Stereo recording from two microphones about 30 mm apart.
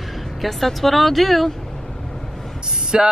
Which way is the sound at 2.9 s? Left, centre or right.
Right.